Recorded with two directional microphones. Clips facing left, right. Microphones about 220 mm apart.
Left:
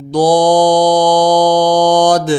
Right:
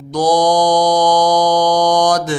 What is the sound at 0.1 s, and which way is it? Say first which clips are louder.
Mantra: left 4 dB; 30° left (ahead or behind).